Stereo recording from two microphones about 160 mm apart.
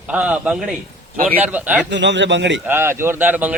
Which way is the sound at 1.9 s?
90° right.